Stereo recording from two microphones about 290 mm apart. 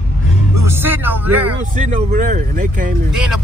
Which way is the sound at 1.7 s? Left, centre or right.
Right.